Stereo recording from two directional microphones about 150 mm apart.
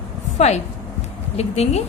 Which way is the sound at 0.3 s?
45° left (ahead or behind).